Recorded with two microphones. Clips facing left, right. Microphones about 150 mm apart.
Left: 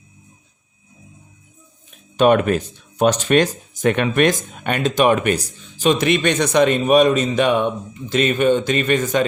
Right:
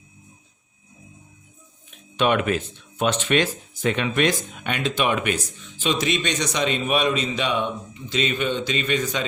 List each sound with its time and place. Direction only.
2.1 s speech: 45° left (ahead or behind)